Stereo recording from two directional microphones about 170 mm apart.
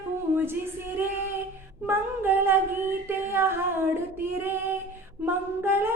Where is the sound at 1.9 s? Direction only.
10° right (ahead or behind).